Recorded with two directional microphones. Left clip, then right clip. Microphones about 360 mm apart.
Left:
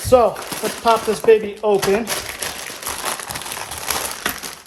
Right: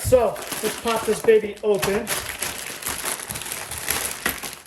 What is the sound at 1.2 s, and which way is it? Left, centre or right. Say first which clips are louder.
Speech: left 4 dB; centre.